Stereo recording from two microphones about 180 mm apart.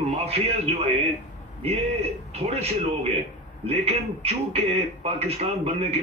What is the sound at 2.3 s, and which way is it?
A man's voice, 35° right (ahead or behind).